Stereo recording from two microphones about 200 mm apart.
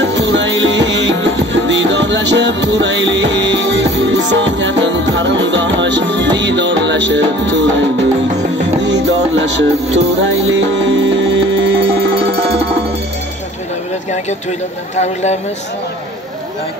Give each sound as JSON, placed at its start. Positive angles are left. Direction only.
{"t": 0.0, "sound": "music", "side_deg": -65}
{"t": 12.3, "sound": "music", "side_deg": -30}